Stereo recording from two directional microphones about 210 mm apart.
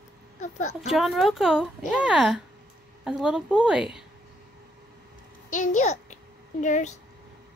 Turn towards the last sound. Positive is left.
turn(degrees=35)  # may be behind; listen again after turning